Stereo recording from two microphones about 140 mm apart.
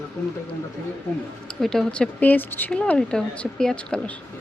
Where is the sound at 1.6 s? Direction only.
5° left (ahead or behind).